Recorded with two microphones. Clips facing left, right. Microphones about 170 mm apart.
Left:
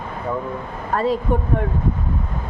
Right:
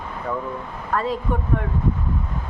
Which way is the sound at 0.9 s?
30° left (ahead or behind).